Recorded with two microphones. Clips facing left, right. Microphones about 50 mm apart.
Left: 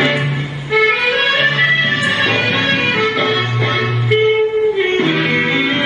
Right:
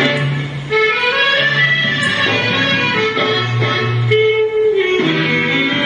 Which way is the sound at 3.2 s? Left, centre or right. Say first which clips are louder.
Even; left.